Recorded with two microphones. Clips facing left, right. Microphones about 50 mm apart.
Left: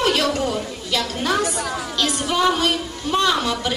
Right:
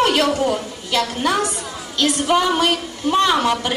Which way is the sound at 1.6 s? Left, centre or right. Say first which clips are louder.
Left 5 dB; left.